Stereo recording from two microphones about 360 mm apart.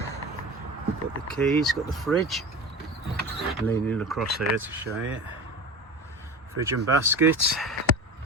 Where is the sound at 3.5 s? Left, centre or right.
Centre.